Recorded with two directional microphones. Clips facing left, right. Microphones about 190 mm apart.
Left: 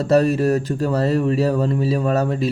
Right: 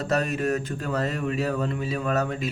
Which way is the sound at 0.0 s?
35° left (ahead or behind).